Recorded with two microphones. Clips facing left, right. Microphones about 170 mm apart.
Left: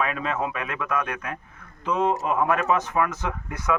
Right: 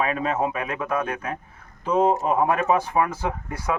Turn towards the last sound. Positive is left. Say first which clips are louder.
# even
turn(degrees=-30)  # may be behind; listen again after turning